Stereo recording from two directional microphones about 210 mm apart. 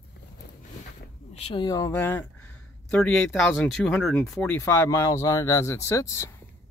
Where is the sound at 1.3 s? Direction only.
25° left (ahead or behind).